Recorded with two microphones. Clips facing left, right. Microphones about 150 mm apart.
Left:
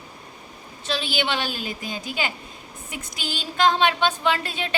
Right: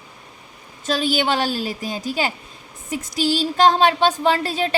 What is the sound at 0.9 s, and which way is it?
A woman's voice, 40° right (ahead or behind).